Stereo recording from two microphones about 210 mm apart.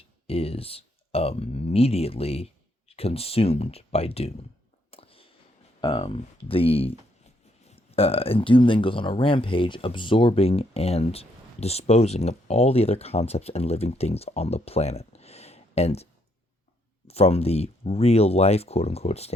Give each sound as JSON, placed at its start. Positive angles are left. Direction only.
{"t": 0.3, "sound": "speech", "side_deg": 30}
{"t": 4.9, "sound": "a sound", "side_deg": 25}
{"t": 5.8, "sound": "speech", "side_deg": 25}
{"t": 17.1, "sound": "speech", "side_deg": 30}